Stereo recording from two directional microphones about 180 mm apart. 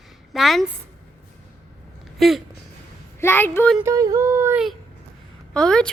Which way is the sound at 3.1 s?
10° left (ahead or behind).